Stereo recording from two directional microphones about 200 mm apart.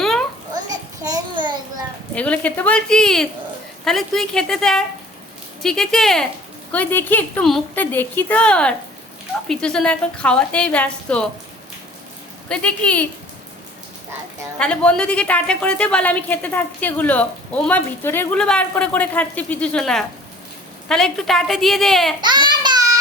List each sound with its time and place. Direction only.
0.0 s children playing: centre (ahead or behind)
0.5 s a sound: 20° right (ahead or behind)
2.1 s a woman's voice: 5° left (ahead or behind)
12.5 s speech: 5° left (ahead or behind)
14.6 s a woman's voice: 5° left (ahead or behind)
22.2 s a sound: 20° right (ahead or behind)